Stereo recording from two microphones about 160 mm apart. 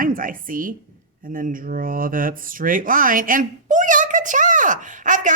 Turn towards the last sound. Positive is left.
turn(degrees=-55)  # may be behind; listen again after turning